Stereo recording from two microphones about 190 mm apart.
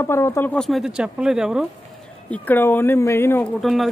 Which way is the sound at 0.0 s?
15° left (ahead or behind).